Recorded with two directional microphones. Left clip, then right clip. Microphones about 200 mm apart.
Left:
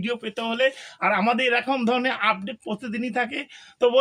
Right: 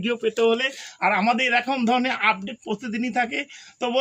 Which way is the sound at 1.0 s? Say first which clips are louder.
Right 1 dB; 10° left (ahead or behind).